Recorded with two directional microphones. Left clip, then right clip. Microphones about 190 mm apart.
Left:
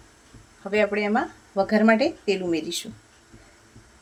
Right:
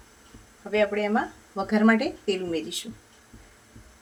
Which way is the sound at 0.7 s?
40° left (ahead or behind).